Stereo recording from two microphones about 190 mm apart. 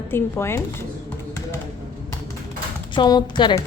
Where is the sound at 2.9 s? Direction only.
25° left (ahead or behind).